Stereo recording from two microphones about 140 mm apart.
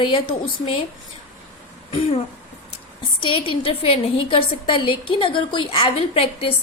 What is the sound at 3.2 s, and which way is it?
A woman's voice, 40° left (ahead or behind).